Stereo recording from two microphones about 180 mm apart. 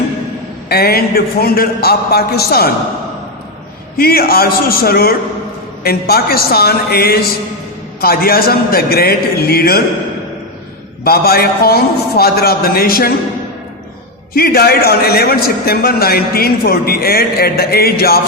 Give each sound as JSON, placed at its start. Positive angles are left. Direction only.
{"t": 0.7, "sound": "a man's voice", "side_deg": 60}
{"t": 3.9, "sound": "a man's voice", "side_deg": 55}
{"t": 11.0, "sound": "a man's voice", "side_deg": 60}
{"t": 14.3, "sound": "a man's voice", "side_deg": 55}